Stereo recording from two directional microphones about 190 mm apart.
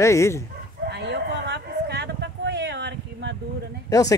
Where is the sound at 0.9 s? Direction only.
65° right (ahead or behind).